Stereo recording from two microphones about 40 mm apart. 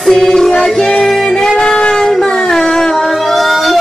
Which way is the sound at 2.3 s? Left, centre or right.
Centre.